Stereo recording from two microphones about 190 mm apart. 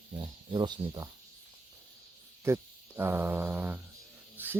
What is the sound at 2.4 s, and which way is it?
Speech, 15° right (ahead or behind).